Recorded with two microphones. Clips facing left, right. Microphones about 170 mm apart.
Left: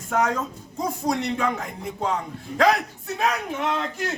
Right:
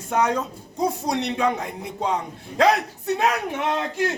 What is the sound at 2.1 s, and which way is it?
Speech, 20° right (ahead or behind).